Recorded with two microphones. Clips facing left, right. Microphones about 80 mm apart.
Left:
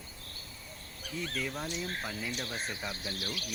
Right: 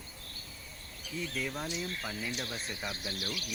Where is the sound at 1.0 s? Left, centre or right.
Left.